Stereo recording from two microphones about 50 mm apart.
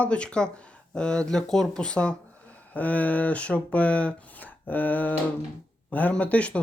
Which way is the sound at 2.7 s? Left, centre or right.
Left.